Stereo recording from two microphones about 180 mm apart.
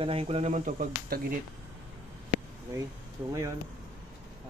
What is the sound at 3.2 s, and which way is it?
Speech, 15° right (ahead or behind).